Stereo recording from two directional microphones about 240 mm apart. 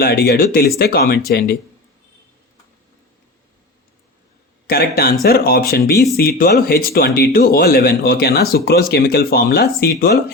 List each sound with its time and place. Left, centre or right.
0.0 s speech: left
4.6 s speech: left